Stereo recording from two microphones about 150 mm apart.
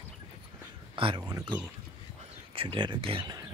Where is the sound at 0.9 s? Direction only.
35° right (ahead or behind).